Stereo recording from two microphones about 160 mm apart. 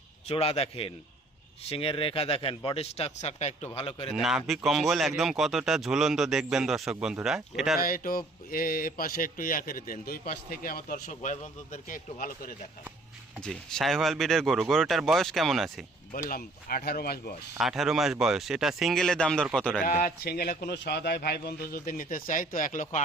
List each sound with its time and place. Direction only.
0.3 s speech: 40° left (ahead or behind)
4.1 s speech: 5° right (ahead or behind)
7.8 s speech: 65° left (ahead or behind)
13.4 s speech: 5° left (ahead or behind)
16.3 s a man's voice: 65° left (ahead or behind)
17.6 s speech: 5° right (ahead or behind)
19.8 s a man's voice: 60° left (ahead or behind)